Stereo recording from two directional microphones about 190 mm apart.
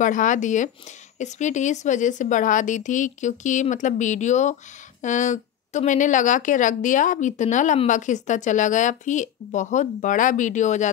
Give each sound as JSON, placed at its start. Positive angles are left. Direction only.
{"t": 0.0, "sound": "a woman's voice", "side_deg": 40}